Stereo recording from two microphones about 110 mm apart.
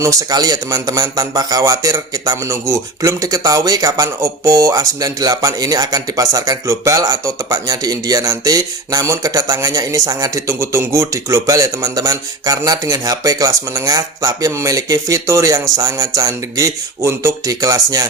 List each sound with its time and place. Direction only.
0.0 s a man's voice: 30° right (ahead or behind)